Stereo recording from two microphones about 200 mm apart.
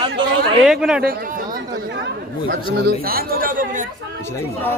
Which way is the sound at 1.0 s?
45° right (ahead or behind).